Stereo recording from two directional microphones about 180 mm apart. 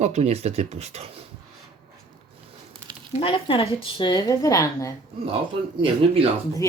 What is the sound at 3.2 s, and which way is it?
A woman's voice, 30° left (ahead or behind).